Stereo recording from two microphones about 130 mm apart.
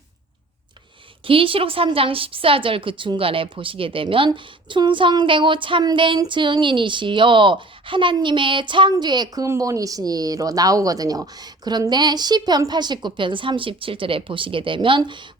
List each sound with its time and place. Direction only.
1.2 s a woman's voice: 45° right (ahead or behind)